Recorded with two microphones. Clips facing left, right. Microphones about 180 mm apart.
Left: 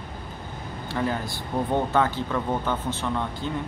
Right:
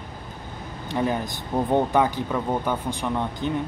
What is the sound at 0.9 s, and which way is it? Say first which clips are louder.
Speech: right 3 dB; 20° right (ahead or behind).